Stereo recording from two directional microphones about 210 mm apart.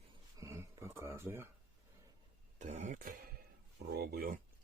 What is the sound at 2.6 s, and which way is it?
Speech, 35° right (ahead or behind).